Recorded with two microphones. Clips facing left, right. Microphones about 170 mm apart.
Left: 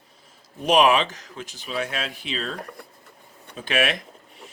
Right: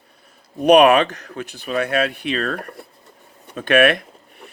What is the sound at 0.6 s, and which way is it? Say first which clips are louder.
Speech: right 7 dB; 60° right (ahead or behind).